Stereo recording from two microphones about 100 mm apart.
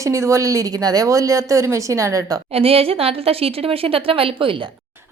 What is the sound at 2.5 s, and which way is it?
A woman's voice, 75° right (ahead or behind).